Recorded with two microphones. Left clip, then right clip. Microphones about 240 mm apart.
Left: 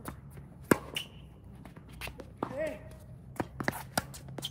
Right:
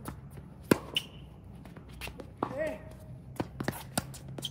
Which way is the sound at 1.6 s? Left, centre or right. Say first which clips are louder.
Even; centre.